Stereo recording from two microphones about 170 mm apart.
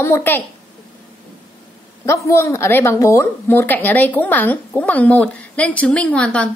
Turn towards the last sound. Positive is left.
turn(degrees=5)  # may be behind; listen again after turning